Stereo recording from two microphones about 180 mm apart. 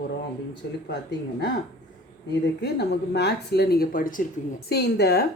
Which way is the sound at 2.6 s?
65° left (ahead or behind).